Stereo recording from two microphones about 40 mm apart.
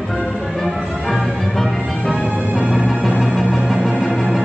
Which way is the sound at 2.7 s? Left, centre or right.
Centre.